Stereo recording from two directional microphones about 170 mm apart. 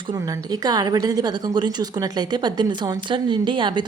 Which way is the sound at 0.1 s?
20° right (ahead or behind).